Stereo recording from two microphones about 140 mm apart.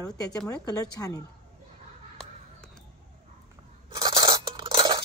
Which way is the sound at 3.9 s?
30° right (ahead or behind).